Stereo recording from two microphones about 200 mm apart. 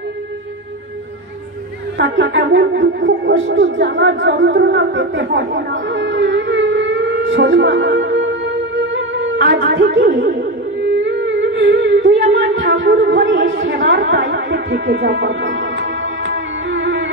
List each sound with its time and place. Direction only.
2.0 s music: 60° right (ahead or behind)